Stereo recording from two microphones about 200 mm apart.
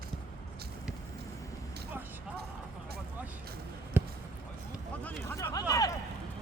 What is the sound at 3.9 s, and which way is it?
Basketball bounce, 10° right (ahead or behind).